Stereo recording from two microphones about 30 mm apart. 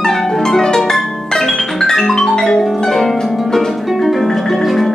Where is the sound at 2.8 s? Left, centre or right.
Centre.